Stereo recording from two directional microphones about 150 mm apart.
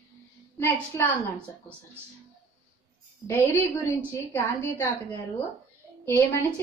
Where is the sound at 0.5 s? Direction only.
15° left (ahead or behind).